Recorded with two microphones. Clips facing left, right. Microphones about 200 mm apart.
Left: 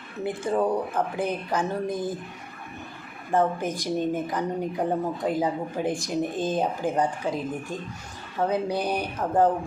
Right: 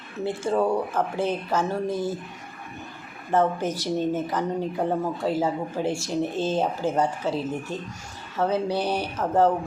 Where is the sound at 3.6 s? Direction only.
15° left (ahead or behind).